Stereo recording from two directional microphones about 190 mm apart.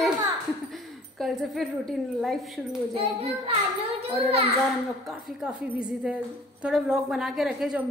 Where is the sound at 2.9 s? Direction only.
30° right (ahead or behind).